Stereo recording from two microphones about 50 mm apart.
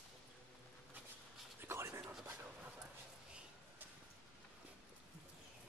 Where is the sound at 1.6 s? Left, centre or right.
Right.